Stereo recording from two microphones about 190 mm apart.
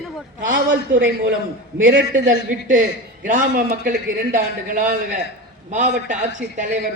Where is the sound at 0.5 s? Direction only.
75° right (ahead or behind).